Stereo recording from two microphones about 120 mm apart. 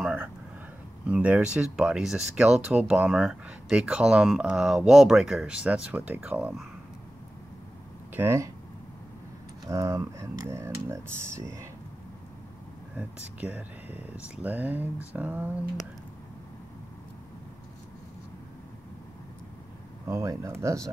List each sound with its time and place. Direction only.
0.0 s a sound: 5° right (ahead or behind)
1.0 s speech: 10° right (ahead or behind)
8.1 s speech: 20° right (ahead or behind)
9.7 s speech: 25° right (ahead or behind)
12.9 s speech: 15° right (ahead or behind)
20.1 s speech: 25° right (ahead or behind)